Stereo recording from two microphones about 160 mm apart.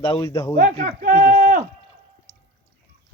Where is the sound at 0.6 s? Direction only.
55° right (ahead or behind).